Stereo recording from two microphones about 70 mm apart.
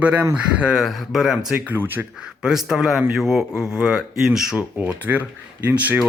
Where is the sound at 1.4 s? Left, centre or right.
Right.